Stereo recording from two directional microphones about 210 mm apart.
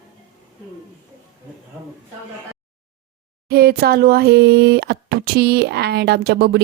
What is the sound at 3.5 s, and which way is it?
Speech, 45° right (ahead or behind).